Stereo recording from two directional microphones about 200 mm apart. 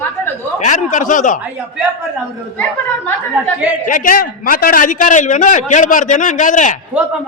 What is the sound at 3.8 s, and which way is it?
A man's voice, 45° left (ahead or behind).